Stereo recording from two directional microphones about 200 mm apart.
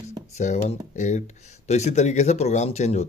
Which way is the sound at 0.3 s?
35° left (ahead or behind).